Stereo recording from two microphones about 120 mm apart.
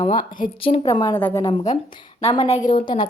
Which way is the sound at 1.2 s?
20° left (ahead or behind).